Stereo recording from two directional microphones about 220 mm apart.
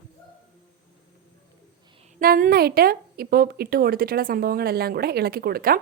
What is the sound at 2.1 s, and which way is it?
A woman's voice, 40° right (ahead or behind).